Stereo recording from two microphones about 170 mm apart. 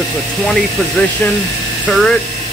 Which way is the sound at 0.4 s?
Centre (ahead or behind).